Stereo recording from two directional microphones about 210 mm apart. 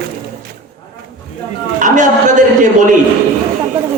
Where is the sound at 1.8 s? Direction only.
35° right (ahead or behind).